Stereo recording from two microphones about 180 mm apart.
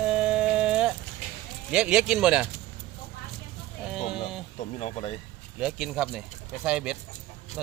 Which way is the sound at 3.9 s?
5° right (ahead or behind).